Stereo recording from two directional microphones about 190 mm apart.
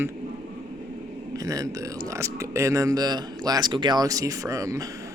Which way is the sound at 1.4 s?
20° right (ahead or behind).